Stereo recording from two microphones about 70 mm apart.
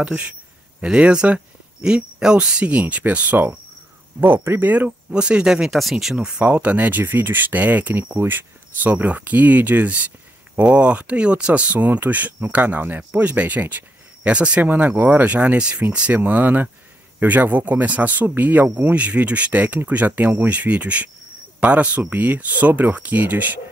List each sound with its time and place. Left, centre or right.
0.7 s speech: centre